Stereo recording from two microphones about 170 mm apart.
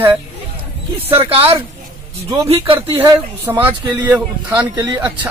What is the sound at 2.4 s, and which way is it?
Speech, 35° right (ahead or behind).